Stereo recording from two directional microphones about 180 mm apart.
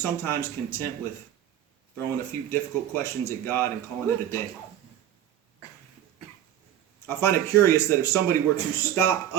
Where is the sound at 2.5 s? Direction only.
15° left (ahead or behind).